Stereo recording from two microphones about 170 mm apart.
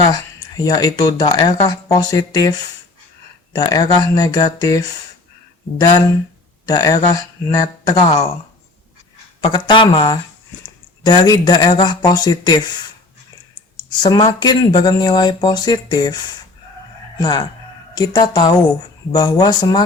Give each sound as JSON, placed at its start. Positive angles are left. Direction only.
{"t": 0.1, "sound": "speech", "side_deg": 20}
{"t": 6.7, "sound": "speech", "side_deg": 25}
{"t": 9.4, "sound": "speech", "side_deg": 30}
{"t": 14.0, "sound": "speech", "side_deg": 25}
{"t": 17.9, "sound": "speech", "side_deg": 25}